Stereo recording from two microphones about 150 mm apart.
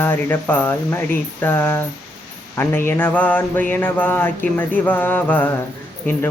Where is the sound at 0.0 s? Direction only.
10° left (ahead or behind).